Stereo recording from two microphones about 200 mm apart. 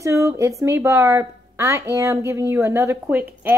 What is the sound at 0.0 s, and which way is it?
A woman's voice, 15° right (ahead or behind).